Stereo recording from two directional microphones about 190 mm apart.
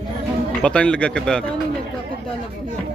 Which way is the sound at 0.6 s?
5° left (ahead or behind).